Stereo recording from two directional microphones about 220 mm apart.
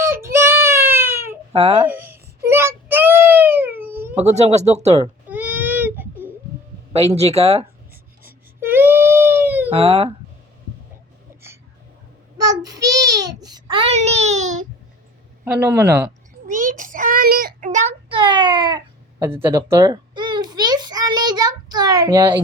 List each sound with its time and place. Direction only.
0.0 s child singing: 10° right (ahead or behind)
1.5 s speech: 25° right (ahead or behind)
1.8 s babbling: 10° right (ahead or behind)
2.5 s child singing: 10° right (ahead or behind)
4.1 s speech: 30° right (ahead or behind)
5.3 s baby cry: 10° right (ahead or behind)
6.9 s speech: 30° right (ahead or behind)
8.2 s baby cry: 10° right (ahead or behind)
9.7 s speech: 25° right (ahead or behind)
12.4 s child singing: 15° right (ahead or behind); by 14.7 s 35° right (ahead or behind)
15.5 s speech: 10° right (ahead or behind)
16.5 s child singing: 35° right (ahead or behind); by 18.8 s 20° right (ahead or behind)
19.2 s speech: 10° right (ahead or behind)
19.7 s a sound: 15° right (ahead or behind)